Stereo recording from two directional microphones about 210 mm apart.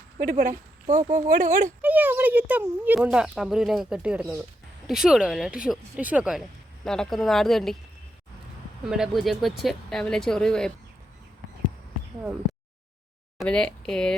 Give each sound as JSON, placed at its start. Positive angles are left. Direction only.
{"t": 0.2, "sound": "speech", "side_deg": -40}
{"t": 1.8, "sound": "speech", "side_deg": -10}
{"t": 8.8, "sound": "speech", "side_deg": 0}
{"t": 13.4, "sound": "speech", "side_deg": 5}